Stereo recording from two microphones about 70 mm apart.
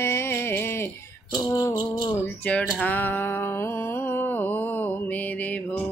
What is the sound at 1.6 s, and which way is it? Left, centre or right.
Rattle, left.